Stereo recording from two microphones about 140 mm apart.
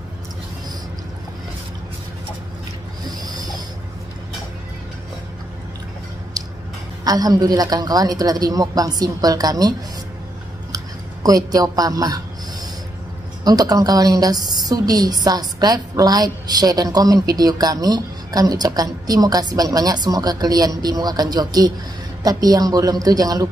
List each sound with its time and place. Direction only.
7.1 s a woman's voice: 25° right (ahead or behind)
11.2 s a woman's voice: 25° right (ahead or behind)
13.4 s a woman's voice: 25° right (ahead or behind)